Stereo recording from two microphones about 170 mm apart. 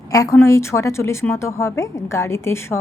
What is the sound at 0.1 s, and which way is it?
A woman's voice, 20° left (ahead or behind).